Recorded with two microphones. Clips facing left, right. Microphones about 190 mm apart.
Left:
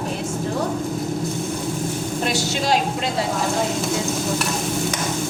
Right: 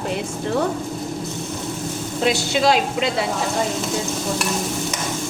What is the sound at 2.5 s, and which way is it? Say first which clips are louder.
Speech: right 4 dB; 65° right (ahead or behind).